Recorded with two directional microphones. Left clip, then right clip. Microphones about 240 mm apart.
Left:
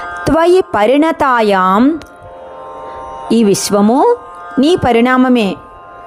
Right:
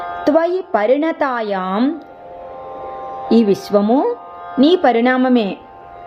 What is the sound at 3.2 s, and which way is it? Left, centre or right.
Speech, left.